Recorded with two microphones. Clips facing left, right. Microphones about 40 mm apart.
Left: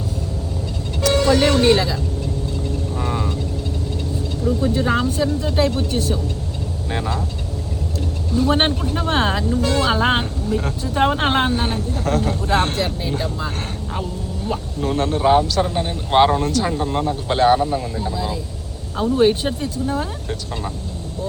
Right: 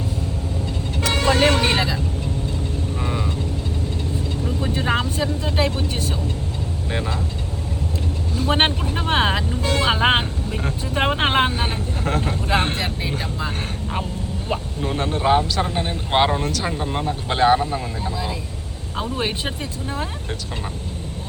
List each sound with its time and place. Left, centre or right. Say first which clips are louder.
1.0 s speech: left 2 dB; right
4.4 s speech: left 5 dB; right
6.9 s speech: left 2 dB; centre
8.4 s speech: left 2 dB; right
11.5 s speech: left 3 dB; centre
14.8 s speech: left 5 dB; centre
19.1 s speech: left 11 dB; centre